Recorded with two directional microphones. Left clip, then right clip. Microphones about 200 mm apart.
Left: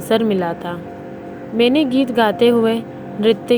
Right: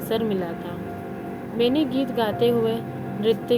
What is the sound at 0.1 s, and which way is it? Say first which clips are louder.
Speech: left 8 dB; 25° left (ahead or behind).